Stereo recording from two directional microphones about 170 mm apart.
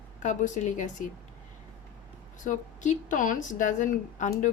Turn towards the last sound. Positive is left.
turn(degrees=45)  # may be behind; listen again after turning